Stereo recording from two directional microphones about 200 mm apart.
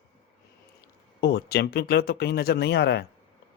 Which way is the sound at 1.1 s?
55° left (ahead or behind).